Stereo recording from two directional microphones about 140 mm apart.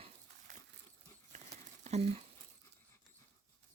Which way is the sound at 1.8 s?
50° right (ahead or behind).